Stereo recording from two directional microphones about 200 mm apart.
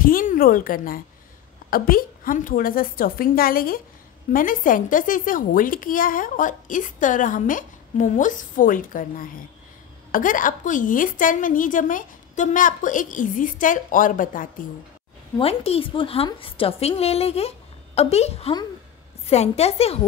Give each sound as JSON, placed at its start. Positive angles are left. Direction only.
{"t": 0.0, "sound": "a woman's voice", "side_deg": 45}
{"t": 15.3, "sound": "a woman's voice", "side_deg": 30}